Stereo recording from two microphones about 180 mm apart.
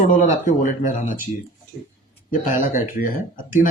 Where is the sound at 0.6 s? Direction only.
45° left (ahead or behind).